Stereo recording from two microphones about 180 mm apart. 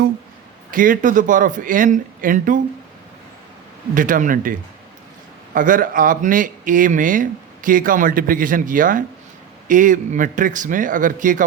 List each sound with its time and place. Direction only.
0.7 s speech: 50° right (ahead or behind)
3.9 s speech: 45° right (ahead or behind)
5.5 s speech: 50° right (ahead or behind)